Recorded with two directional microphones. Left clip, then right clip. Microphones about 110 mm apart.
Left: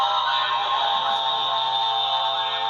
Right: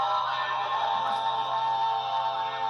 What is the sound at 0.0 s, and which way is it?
Music, 35° left (ahead or behind).